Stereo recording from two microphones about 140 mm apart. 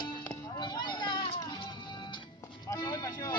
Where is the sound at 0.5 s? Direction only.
30° left (ahead or behind).